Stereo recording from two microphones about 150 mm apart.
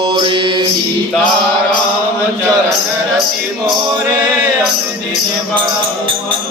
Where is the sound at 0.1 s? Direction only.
35° right (ahead or behind).